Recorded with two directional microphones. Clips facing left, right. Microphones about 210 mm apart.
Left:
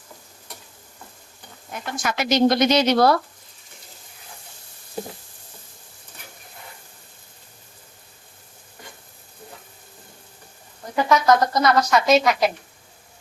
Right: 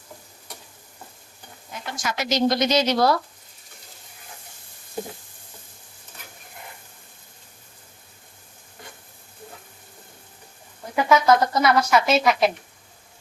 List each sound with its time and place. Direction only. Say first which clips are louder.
1.7 s speech: left 3 dB; 55° left (ahead or behind)
10.9 s speech: even; 5° right (ahead or behind)